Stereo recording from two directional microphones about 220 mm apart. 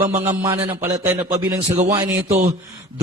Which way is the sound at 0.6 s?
10° right (ahead or behind).